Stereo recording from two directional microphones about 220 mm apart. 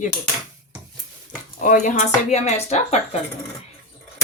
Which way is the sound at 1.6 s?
35° left (ahead or behind).